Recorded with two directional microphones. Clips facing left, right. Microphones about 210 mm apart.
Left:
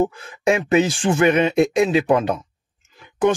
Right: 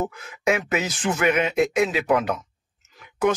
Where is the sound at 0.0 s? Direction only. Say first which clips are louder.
Left 5 dB; 30° left (ahead or behind).